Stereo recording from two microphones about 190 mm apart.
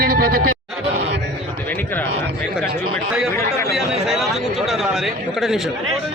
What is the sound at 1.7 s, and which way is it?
Speech, 10° left (ahead or behind).